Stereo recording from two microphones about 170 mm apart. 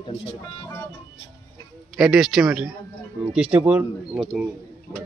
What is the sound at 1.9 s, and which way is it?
A man's voice, centre (ahead or behind).